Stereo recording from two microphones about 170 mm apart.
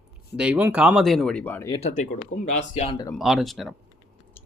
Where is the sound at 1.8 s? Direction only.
45° left (ahead or behind).